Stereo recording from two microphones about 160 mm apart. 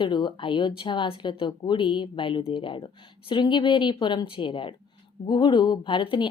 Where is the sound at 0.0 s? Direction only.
30° left (ahead or behind).